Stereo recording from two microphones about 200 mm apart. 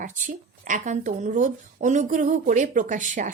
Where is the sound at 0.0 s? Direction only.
40° right (ahead or behind).